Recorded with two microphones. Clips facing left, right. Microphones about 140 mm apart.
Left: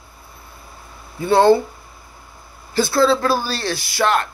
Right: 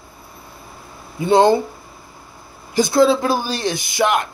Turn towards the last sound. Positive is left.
turn(degrees=-15)  # may be behind; listen again after turning